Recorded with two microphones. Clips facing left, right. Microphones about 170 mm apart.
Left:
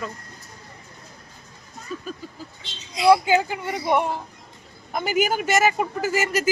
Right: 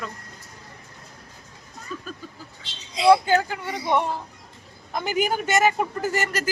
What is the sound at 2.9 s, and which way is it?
Speech, 25° right (ahead or behind).